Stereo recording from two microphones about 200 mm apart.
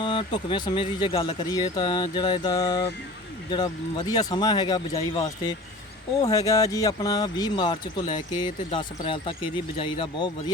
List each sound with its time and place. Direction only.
0.0 s speech: 25° left (ahead or behind)
6.3 s speech: 15° left (ahead or behind)